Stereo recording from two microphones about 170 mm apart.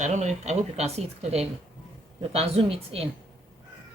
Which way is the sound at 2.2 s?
35° right (ahead or behind).